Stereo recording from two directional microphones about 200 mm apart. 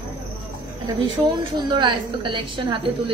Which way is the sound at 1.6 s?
20° right (ahead or behind).